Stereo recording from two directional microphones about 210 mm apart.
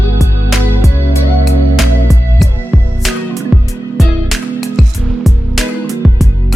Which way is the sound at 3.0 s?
Centre (ahead or behind).